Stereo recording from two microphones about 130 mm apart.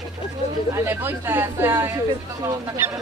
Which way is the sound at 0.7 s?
20° right (ahead or behind).